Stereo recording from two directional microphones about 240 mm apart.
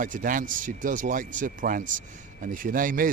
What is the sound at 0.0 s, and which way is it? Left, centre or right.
Speech, right.